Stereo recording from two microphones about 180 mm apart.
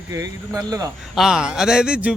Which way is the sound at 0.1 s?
20° right (ahead or behind).